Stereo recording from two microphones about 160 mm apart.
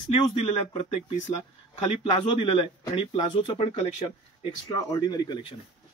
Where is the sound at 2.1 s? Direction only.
35° left (ahead or behind).